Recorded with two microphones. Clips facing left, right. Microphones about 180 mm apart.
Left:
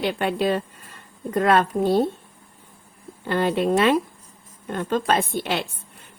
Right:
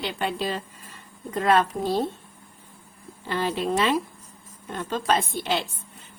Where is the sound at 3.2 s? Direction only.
55° left (ahead or behind).